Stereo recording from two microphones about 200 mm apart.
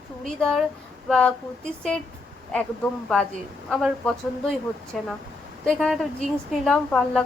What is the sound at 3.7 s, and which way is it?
A woman's voice, centre (ahead or behind).